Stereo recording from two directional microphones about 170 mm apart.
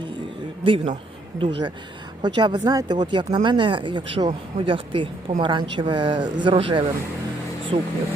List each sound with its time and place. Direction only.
0.6 s speech: 30° right (ahead or behind)